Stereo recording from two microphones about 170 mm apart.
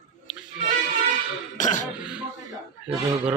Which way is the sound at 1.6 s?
50° left (ahead or behind).